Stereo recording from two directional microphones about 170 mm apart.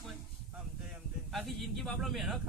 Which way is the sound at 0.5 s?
5° right (ahead or behind).